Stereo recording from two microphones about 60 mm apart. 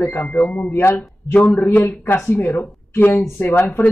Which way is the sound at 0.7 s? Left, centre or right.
Left.